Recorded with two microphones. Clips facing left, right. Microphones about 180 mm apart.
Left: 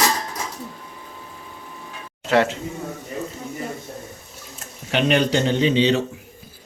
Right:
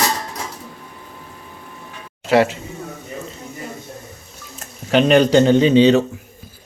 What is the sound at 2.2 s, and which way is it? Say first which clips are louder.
Speech: right 3 dB; 10° right (ahead or behind).